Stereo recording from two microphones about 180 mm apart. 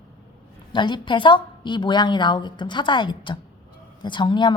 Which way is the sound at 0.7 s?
25° left (ahead or behind).